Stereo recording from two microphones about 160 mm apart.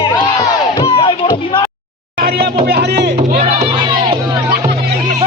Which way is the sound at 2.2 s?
80° right.